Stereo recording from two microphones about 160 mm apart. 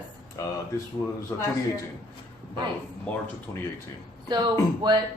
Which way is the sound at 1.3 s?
25° left (ahead or behind).